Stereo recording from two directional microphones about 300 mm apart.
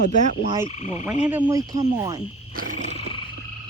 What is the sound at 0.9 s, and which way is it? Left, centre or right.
Frog, centre.